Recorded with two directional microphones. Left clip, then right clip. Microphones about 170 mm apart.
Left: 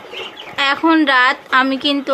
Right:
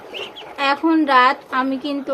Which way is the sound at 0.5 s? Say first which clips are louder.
Left 3 dB; centre (ahead or behind).